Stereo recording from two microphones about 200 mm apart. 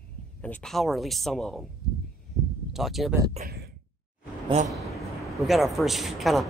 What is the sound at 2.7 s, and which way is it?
Speech, centre (ahead or behind).